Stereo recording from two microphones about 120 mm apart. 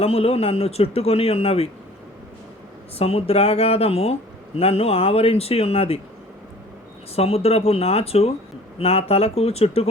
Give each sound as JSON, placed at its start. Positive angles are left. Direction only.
{"t": 0.0, "sound": "speech", "side_deg": 55}
{"t": 3.0, "sound": "speech", "side_deg": 55}
{"t": 7.2, "sound": "speech", "side_deg": 55}